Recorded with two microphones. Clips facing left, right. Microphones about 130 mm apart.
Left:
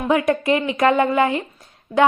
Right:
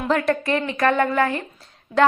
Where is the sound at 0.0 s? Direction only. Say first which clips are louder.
Left 3 dB; 10° left (ahead or behind).